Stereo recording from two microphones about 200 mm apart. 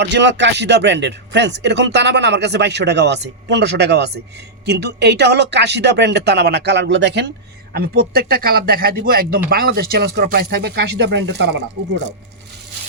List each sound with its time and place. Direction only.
0.0 s speech: 60° right (ahead or behind)
7.7 s speech: 50° right (ahead or behind)